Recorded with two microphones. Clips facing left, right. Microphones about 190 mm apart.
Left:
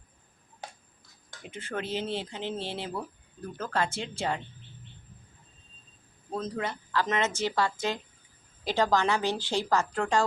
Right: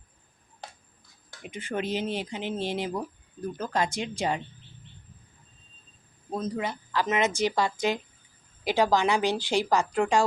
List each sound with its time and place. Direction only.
1.3 s speech: 15° right (ahead or behind)
6.3 s speech: 10° right (ahead or behind)